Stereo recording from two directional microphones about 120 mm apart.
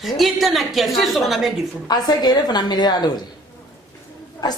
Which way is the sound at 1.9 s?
35° left (ahead or behind).